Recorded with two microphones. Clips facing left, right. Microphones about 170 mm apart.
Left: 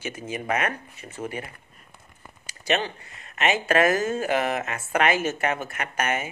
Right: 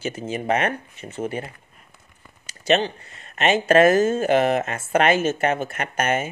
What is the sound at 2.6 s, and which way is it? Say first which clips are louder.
Speech: right 5 dB; 25° right (ahead or behind).